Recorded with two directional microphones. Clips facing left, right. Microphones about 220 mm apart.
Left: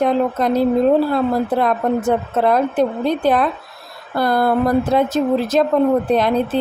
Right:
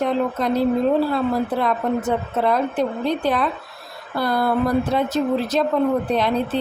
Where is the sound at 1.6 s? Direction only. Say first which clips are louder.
Left 4 dB; 50° left (ahead or behind).